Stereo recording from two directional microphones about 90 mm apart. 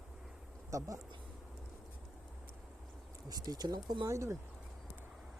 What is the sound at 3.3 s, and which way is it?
Speech, 45° right (ahead or behind).